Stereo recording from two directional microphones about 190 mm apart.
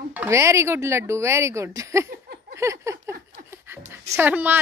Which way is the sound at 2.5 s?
15° right (ahead or behind).